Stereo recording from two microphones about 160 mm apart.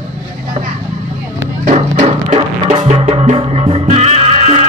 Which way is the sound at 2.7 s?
35° right (ahead or behind).